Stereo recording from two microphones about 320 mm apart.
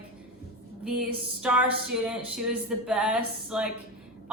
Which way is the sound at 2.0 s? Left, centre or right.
Centre.